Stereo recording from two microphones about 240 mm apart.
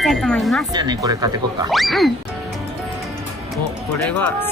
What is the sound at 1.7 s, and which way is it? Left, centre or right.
Speech, centre.